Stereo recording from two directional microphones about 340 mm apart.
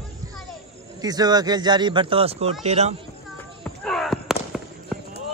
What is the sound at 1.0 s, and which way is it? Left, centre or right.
Speech, centre.